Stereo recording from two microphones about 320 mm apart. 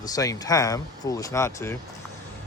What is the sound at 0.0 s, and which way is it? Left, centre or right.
Speech, centre.